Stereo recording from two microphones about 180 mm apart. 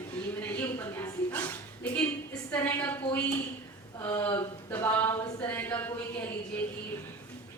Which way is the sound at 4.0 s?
10° left (ahead or behind).